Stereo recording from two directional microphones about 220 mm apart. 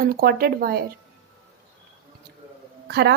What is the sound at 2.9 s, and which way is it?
Speech, 50° right (ahead or behind).